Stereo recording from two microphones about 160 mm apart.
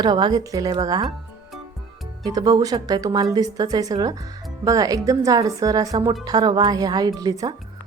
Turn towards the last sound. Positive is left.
turn(degrees=-25)  # may be behind; listen again after turning